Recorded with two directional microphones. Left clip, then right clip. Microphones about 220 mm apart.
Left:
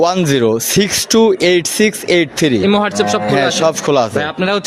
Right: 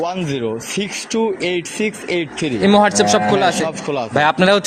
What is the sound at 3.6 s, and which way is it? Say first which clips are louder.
Speech: left 9 dB; 55° left (ahead or behind).